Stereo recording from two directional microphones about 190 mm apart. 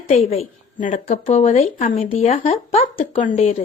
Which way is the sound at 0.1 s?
35° left (ahead or behind).